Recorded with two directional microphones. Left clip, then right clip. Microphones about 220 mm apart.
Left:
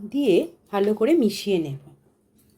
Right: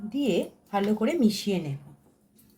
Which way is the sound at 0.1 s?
40° left (ahead or behind).